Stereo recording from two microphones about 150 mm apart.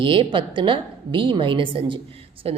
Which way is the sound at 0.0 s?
35° right (ahead or behind).